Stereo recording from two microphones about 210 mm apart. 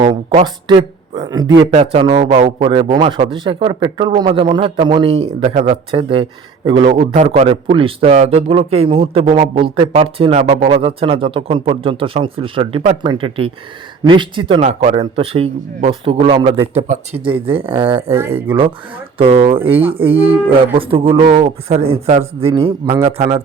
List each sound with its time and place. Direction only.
0.0 s a man's voice: 25° right (ahead or behind)
18.1 s speech: 10° right (ahead or behind)
19.2 s a man's voice: 25° right (ahead or behind)